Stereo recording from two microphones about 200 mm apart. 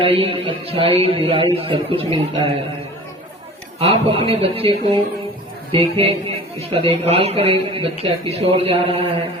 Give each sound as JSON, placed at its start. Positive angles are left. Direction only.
{"t": 0.0, "sound": "speech", "side_deg": -25}
{"t": 3.8, "sound": "speech", "side_deg": -30}